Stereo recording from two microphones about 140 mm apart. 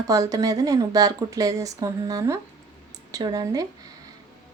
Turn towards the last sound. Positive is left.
turn(degrees=-25)  # may be behind; listen again after turning